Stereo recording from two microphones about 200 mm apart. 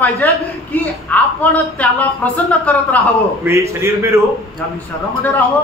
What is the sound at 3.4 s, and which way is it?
Speech, 15° right (ahead or behind).